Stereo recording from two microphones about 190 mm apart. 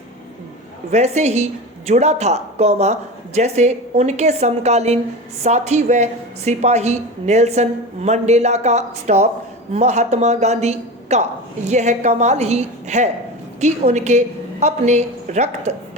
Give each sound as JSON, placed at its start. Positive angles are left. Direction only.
{"t": 0.9, "sound": "a woman's voice", "side_deg": -35}